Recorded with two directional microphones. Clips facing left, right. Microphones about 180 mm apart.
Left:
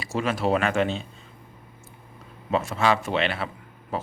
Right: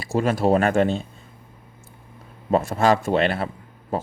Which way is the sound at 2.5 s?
50° right (ahead or behind).